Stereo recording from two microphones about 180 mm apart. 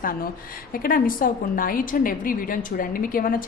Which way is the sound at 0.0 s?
50° left (ahead or behind).